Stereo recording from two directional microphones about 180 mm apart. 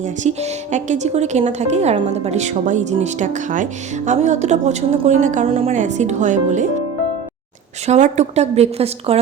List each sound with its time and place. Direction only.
0.0 s speech: 40° right (ahead or behind)
7.9 s speech: 40° right (ahead or behind)